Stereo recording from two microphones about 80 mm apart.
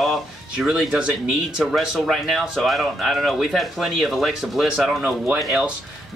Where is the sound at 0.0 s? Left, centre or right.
Centre.